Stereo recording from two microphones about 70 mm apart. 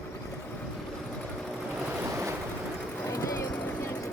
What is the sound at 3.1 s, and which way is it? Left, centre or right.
Run, left.